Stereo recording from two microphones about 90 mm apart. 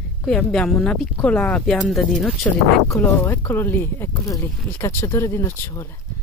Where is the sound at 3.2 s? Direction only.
20° left (ahead or behind).